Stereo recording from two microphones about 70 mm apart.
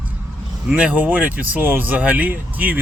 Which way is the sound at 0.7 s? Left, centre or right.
Centre.